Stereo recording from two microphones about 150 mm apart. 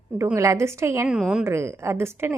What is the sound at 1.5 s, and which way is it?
Speech, 20° right (ahead or behind).